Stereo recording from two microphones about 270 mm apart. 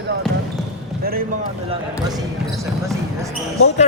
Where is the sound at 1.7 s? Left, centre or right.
Centre.